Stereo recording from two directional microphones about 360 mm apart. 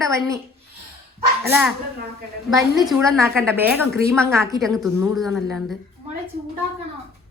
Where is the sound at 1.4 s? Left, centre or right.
Centre.